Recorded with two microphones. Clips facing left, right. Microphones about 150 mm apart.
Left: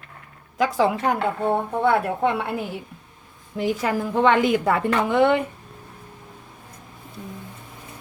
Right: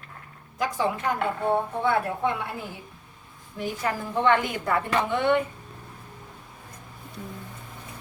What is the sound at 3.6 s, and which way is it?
A woman's voice, 85° left.